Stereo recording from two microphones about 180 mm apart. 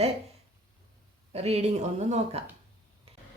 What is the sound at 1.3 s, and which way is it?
Speech, 35° right (ahead or behind).